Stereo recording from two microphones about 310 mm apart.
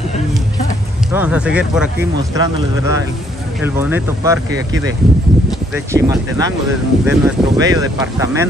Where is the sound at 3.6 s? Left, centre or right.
Centre.